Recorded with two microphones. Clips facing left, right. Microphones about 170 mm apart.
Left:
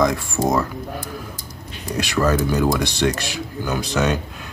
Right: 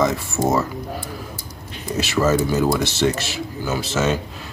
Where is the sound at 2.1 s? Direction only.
5° right (ahead or behind).